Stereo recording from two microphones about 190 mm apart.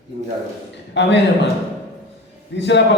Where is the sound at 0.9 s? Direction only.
65° left (ahead or behind).